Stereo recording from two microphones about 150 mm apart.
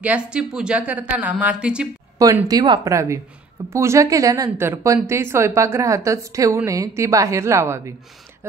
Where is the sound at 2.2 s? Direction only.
20° right (ahead or behind).